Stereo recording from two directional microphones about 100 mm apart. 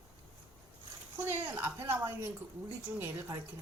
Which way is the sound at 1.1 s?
25° right (ahead or behind).